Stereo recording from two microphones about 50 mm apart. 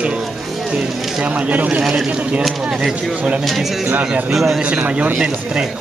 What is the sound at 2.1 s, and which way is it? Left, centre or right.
Speech, right.